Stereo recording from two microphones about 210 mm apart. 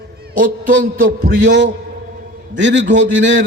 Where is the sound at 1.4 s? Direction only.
60° right (ahead or behind).